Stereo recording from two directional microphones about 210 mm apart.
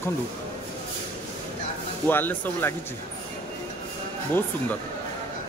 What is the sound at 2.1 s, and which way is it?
Speech, 10° left (ahead or behind).